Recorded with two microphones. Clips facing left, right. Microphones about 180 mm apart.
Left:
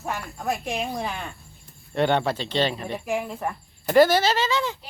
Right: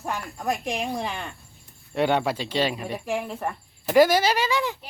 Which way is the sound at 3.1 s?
5° left (ahead or behind).